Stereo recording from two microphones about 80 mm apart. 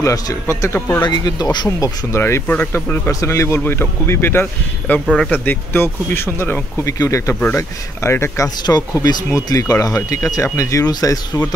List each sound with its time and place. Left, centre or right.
0.0 s a man's voice: left
1.0 s speech: left
1.8 s a man's voice: left
2.4 s speech: centre
3.1 s a man's voice: left
9.0 s speech: left